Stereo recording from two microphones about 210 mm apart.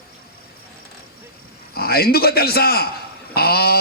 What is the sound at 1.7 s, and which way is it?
Speech, 45° left (ahead or behind).